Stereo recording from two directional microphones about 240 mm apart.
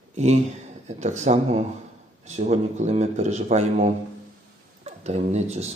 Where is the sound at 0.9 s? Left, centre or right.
Right.